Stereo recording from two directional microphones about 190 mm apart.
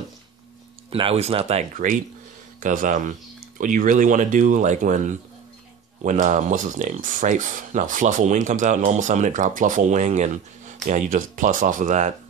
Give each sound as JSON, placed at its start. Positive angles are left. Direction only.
{"t": 0.8, "sound": "speech", "side_deg": -30}